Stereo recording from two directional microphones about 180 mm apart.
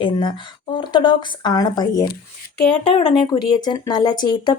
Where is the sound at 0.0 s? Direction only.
25° left (ahead or behind).